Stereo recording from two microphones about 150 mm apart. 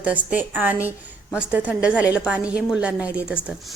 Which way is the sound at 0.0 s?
10° right (ahead or behind).